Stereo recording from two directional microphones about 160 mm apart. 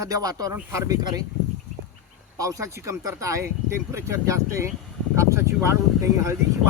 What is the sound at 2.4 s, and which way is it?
Speech, 20° right (ahead or behind).